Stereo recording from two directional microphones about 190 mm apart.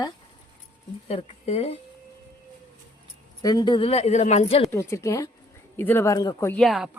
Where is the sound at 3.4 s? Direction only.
20° left (ahead or behind).